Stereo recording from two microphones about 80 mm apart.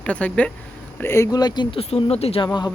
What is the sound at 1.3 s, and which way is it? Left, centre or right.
Speech, left.